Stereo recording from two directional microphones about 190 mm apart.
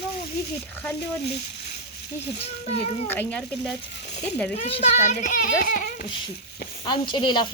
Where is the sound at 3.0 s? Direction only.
10° left (ahead or behind).